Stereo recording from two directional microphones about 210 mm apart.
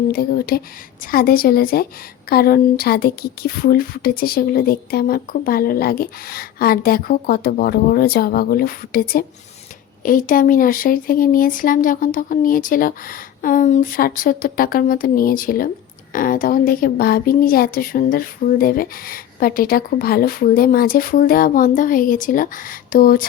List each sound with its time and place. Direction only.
0.1 s speech: 45° left (ahead or behind)